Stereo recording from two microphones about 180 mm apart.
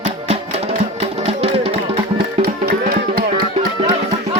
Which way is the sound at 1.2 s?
35° right (ahead or behind).